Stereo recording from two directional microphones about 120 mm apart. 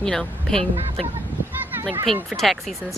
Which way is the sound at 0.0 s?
5° left (ahead or behind).